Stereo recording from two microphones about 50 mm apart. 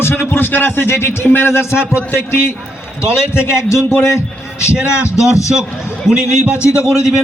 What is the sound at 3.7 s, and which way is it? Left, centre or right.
Speech, left.